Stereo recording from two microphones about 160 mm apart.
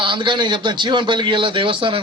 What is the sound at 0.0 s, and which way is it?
Speech, 30° right (ahead or behind).